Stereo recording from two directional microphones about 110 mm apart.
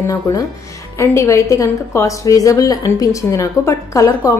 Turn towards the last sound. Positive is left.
turn(degrees=30)  # may be behind; listen again after turning